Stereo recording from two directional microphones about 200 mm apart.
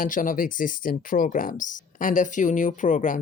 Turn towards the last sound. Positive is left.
turn(degrees=40)  # may be behind; listen again after turning